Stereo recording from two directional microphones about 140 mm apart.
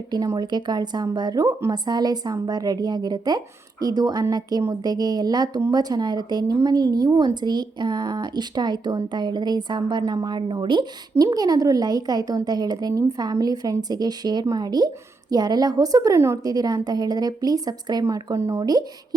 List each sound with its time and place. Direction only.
0.1 s speech: 30° right (ahead or behind)